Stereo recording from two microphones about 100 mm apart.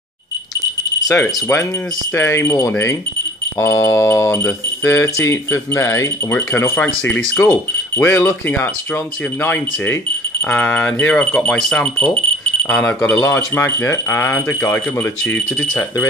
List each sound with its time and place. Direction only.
1.2 s speech: 20° left (ahead or behind)